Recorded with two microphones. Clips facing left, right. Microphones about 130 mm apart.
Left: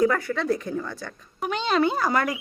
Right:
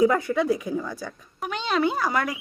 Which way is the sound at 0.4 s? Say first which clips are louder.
Right 1 dB; 5° right (ahead or behind).